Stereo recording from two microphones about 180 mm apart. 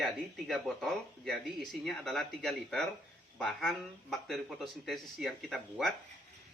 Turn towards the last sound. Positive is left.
turn(degrees=0)  # may be behind; listen again after turning